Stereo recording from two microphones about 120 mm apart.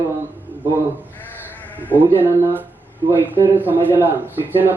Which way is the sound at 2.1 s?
15° right (ahead or behind).